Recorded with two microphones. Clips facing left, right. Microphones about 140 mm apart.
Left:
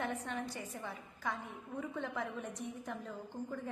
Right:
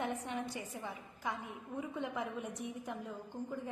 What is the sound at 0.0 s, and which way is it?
A woman's voice, 15° right (ahead or behind).